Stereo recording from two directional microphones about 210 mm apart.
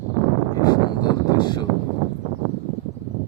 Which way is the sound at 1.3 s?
20° left (ahead or behind).